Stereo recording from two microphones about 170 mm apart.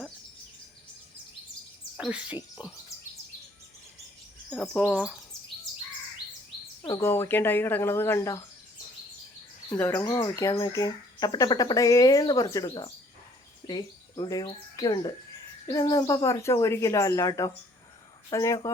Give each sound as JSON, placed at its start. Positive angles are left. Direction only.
{"t": 2.0, "sound": "frog", "side_deg": -5}
{"t": 4.4, "sound": "bird vocalization", "side_deg": 5}
{"t": 4.8, "sound": "speech", "side_deg": -5}
{"t": 6.8, "sound": "speech", "side_deg": 15}
{"t": 9.8, "sound": "speech", "side_deg": 10}
{"t": 10.1, "sound": "speech", "side_deg": 25}